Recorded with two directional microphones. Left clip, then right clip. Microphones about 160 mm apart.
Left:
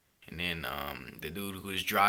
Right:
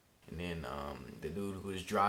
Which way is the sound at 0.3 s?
10° left (ahead or behind).